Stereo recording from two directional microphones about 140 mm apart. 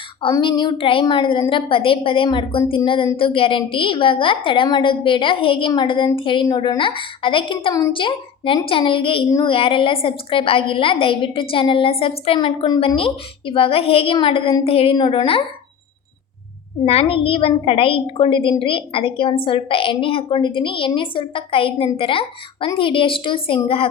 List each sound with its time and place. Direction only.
0.2 s a woman's voice: 35° left (ahead or behind)
16.8 s a woman's voice: 45° left (ahead or behind)